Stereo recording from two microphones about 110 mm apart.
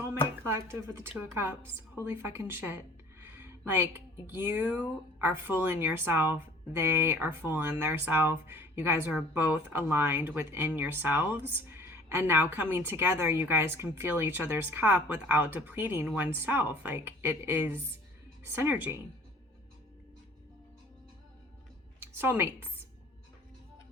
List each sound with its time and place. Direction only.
0.1 s a woman's voice: 25° right (ahead or behind)
22.0 s a woman's voice: 20° right (ahead or behind)